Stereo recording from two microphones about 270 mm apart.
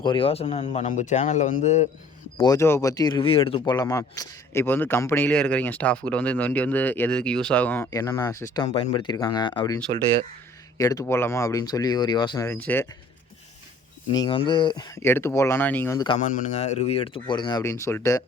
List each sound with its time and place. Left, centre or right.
0.0 s speech: centre
2.4 s speech: centre
14.2 s speech: centre
16.1 s speech: left; by 18.2 s centre